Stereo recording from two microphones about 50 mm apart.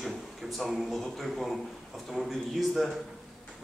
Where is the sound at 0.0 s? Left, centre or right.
Centre.